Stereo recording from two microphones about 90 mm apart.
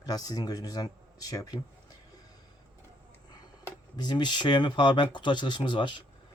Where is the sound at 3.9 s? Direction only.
50° left (ahead or behind).